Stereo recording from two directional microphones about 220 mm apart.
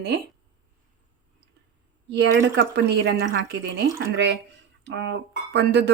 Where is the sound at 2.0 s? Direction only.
50° right (ahead or behind).